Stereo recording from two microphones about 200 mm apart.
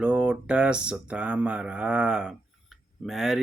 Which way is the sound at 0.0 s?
5° right (ahead or behind).